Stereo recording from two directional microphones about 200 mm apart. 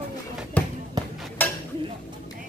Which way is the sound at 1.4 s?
10° left (ahead or behind).